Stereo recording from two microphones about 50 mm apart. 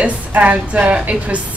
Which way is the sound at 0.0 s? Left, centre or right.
Right.